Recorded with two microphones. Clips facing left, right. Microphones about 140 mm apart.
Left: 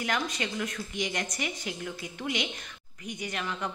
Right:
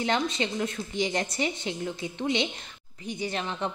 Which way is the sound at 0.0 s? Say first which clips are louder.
Right 4 dB; 25° right (ahead or behind).